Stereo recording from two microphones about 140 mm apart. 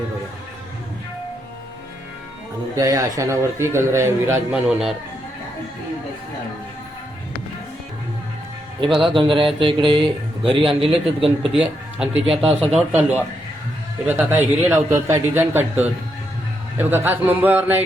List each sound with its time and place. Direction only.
2.7 s a man's voice: 25° right (ahead or behind)
4.5 s speech: 5° right (ahead or behind)
9.0 s speech: 40° right (ahead or behind)
11.5 s speech: 5° right (ahead or behind)
12.5 s speech: 45° right (ahead or behind)
13.0 s speech: 10° right (ahead or behind)